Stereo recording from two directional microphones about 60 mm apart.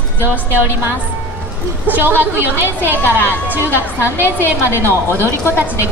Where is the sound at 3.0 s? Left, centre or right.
Left.